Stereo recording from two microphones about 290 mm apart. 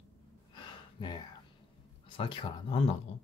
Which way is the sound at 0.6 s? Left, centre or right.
Centre.